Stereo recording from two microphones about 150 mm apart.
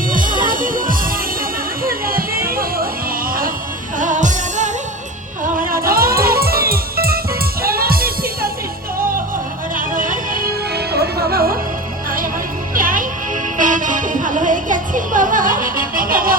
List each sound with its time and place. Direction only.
0.1 s music: 65° right (ahead or behind)
3.9 s music: 60° right (ahead or behind)
5.5 s music: 75° right (ahead or behind)
9.7 s music: 65° right (ahead or behind); by 11.5 s 90° right
12.7 s music: 65° right (ahead or behind)